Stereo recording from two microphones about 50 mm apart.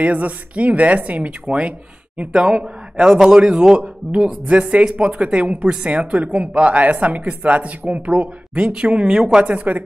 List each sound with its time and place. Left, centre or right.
0.0 s a man's voice: right